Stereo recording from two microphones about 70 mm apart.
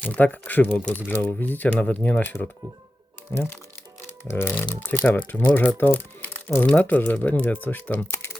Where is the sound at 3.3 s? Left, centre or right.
Left.